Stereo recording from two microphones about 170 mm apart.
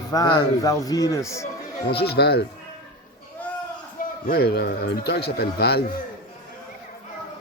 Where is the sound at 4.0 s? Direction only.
60° left (ahead or behind).